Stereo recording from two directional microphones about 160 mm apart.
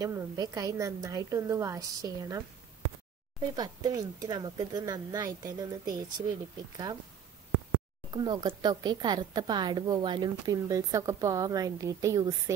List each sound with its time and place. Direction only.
0.0 s speech: 25° right (ahead or behind)
3.5 s speech: 25° right (ahead or behind)
8.1 s speech: 25° right (ahead or behind)